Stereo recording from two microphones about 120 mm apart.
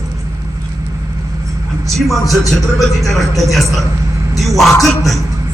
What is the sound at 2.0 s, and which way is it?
A man's voice, centre (ahead or behind).